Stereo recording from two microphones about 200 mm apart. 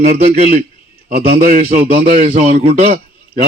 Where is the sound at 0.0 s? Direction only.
45° right (ahead or behind).